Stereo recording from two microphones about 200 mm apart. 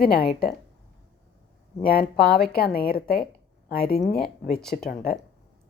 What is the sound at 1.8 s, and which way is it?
A woman's voice, 50° left (ahead or behind).